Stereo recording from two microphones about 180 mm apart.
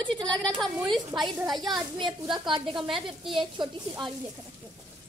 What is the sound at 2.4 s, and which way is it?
Speech, 25° right (ahead or behind).